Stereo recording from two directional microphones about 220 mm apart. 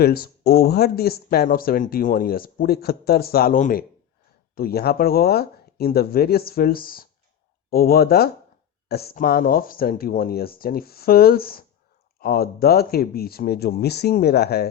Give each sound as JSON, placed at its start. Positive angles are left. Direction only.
{"t": 0.0, "sound": "speech", "side_deg": 45}